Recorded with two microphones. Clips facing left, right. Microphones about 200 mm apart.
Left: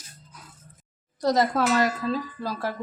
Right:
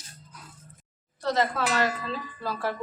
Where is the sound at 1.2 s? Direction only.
40° left (ahead or behind).